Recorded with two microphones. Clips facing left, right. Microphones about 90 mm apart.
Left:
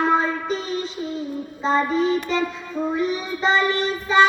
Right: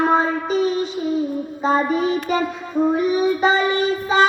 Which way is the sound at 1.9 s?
15° right (ahead or behind).